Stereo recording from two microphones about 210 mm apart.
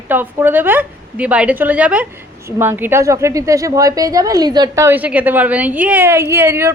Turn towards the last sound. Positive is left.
turn(degrees=-10)  # may be behind; listen again after turning